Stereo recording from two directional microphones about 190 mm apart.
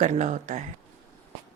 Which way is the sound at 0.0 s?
40° right (ahead or behind).